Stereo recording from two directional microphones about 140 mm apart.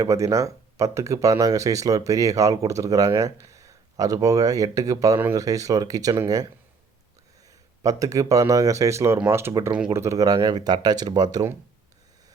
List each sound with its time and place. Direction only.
0.0 s speech: 20° right (ahead or behind)
7.8 s speech: 25° right (ahead or behind)